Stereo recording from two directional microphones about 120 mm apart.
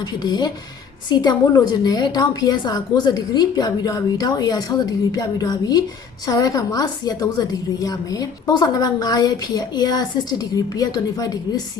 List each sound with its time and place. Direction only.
0.0 s a woman's voice: 35° left (ahead or behind)